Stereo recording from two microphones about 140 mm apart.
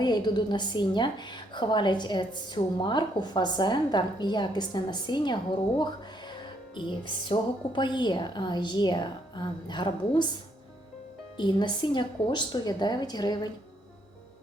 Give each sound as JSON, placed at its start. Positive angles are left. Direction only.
{"t": 0.0, "sound": "a woman's voice", "side_deg": 30}
{"t": 11.3, "sound": "a woman's voice", "side_deg": 30}